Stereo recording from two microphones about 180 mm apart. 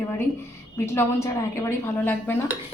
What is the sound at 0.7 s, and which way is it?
A woman's voice, 15° left (ahead or behind).